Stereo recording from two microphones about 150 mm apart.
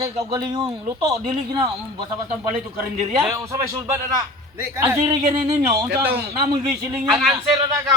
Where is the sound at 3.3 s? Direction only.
20° right (ahead or behind).